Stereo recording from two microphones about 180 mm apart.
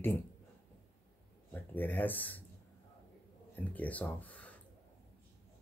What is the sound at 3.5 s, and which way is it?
Speech, 10° left (ahead or behind).